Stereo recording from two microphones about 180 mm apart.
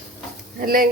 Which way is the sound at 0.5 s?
55° right (ahead or behind).